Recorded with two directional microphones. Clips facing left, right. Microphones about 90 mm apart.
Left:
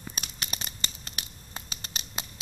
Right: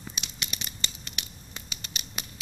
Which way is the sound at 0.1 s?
40° left (ahead or behind).